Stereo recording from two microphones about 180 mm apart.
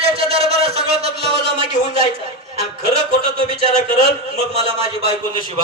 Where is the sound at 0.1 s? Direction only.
35° right (ahead or behind).